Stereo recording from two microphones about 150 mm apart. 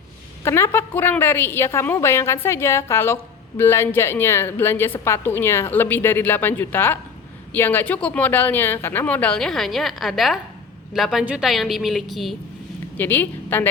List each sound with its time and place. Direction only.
0.4 s a woman's voice: 15° left (ahead or behind); by 12.4 s centre (ahead or behind)
13.0 s speech: 15° left (ahead or behind)